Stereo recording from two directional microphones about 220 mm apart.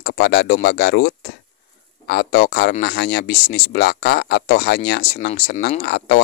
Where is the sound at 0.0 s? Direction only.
45° left (ahead or behind).